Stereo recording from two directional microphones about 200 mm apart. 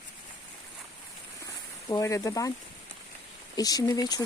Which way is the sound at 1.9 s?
15° left (ahead or behind).